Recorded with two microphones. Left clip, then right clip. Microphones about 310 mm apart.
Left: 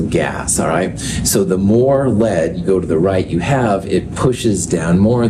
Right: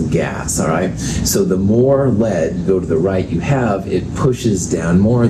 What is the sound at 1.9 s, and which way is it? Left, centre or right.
Speech, left.